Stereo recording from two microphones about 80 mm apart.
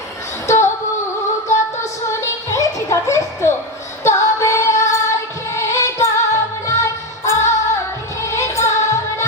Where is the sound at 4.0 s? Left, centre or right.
Left.